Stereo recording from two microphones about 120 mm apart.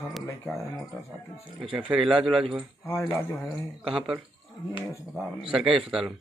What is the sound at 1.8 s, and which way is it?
Speech, 5° right (ahead or behind).